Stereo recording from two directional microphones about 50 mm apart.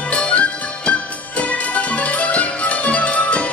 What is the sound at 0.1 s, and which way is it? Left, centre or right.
Music, left.